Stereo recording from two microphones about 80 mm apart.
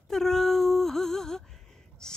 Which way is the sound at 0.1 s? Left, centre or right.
Centre.